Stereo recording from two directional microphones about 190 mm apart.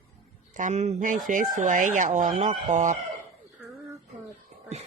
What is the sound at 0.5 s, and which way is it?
Speech, 40° right (ahead or behind).